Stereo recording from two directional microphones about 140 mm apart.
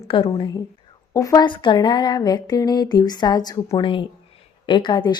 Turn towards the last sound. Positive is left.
turn(degrees=30)  # may be behind; listen again after turning